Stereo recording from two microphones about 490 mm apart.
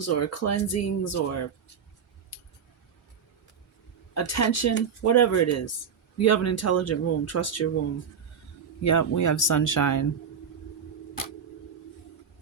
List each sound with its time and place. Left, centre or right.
0.0 s speech: left
4.1 s speech: left
8.8 s speech: left